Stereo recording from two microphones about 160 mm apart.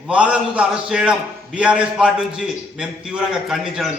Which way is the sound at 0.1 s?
5° right (ahead or behind).